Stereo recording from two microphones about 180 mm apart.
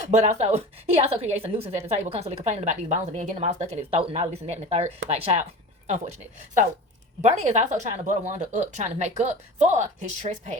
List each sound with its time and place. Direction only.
0.1 s speech: 40° right (ahead or behind)
7.2 s speech: 40° right (ahead or behind)